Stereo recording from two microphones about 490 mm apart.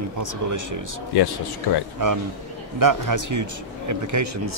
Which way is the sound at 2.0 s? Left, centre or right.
Right.